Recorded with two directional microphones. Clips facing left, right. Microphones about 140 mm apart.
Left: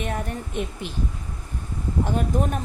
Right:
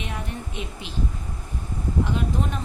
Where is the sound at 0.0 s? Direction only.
50° left (ahead or behind).